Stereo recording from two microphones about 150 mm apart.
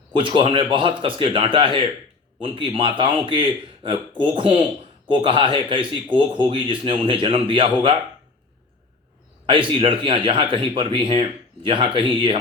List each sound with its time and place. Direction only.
0.1 s speech: 35° right (ahead or behind)
9.5 s speech: 35° right (ahead or behind)